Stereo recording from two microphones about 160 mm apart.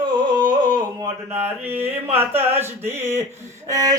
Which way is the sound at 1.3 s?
15° right (ahead or behind).